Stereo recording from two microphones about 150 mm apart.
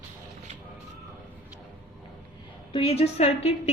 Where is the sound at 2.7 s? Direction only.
40° left (ahead or behind).